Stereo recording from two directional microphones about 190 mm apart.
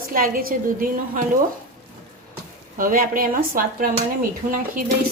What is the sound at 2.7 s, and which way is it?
A woman's voice, 45° right (ahead or behind).